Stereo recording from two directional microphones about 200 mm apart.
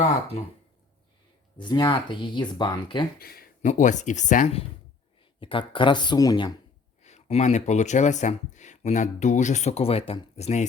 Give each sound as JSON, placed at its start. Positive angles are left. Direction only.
{"t": 1.6, "sound": "speech", "side_deg": 25}
{"t": 3.2, "sound": "speech", "side_deg": 50}
{"t": 5.4, "sound": "speech", "side_deg": 25}
{"t": 7.0, "sound": "speech", "side_deg": 35}